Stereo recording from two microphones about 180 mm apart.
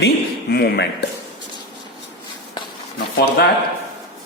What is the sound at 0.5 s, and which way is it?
Speech, 60° left (ahead or behind).